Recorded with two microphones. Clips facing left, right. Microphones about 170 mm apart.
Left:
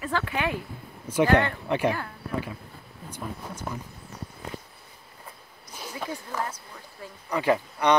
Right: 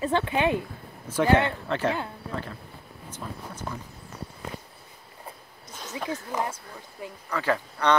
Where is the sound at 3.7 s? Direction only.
10° left (ahead or behind).